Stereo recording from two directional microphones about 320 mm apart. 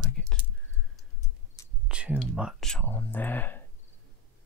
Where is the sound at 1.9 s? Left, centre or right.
Centre.